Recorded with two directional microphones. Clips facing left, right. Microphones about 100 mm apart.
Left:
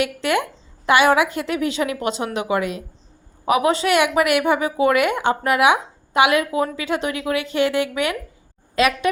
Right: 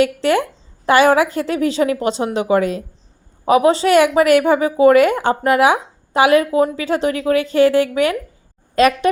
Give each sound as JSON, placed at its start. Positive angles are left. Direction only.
{"t": 0.0, "sound": "a woman's voice", "side_deg": -35}